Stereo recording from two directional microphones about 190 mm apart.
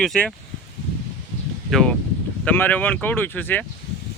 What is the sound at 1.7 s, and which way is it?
Speech, 5° left (ahead or behind).